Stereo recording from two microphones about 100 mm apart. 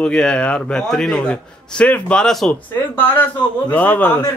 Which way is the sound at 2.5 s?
20° left (ahead or behind).